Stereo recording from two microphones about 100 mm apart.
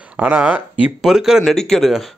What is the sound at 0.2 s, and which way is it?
Speech, 15° right (ahead or behind).